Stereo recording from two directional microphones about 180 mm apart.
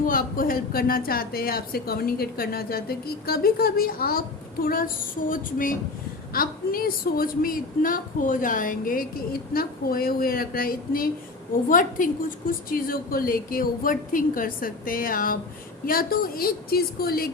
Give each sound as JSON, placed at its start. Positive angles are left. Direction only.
{"t": 0.0, "sound": "a woman's voice", "side_deg": 50}